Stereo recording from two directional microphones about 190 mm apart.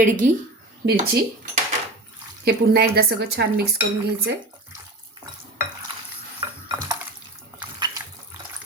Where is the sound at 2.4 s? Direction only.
60° right (ahead or behind).